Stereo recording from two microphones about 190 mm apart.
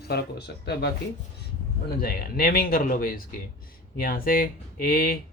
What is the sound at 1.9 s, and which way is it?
Speech, 55° left (ahead or behind).